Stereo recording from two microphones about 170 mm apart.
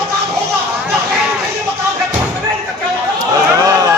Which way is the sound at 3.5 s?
20° right (ahead or behind).